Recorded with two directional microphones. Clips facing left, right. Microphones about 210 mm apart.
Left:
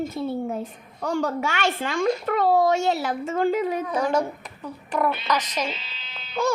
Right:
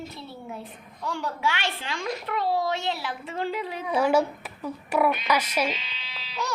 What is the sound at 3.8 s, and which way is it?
A child's voice, 10° right (ahead or behind).